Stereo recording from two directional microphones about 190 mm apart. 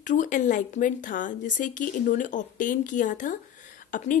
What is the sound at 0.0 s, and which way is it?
Speech, 40° left (ahead or behind).